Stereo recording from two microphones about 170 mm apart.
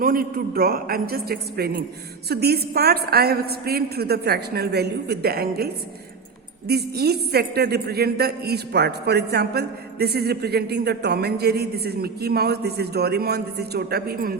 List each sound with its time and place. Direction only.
0.0 s a man's voice: 60° right (ahead or behind)